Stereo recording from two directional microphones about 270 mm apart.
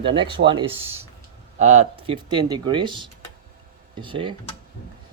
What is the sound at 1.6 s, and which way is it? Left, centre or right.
Speech, right.